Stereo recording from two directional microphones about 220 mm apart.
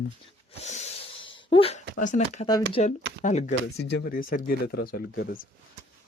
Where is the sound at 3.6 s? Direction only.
50° left (ahead or behind).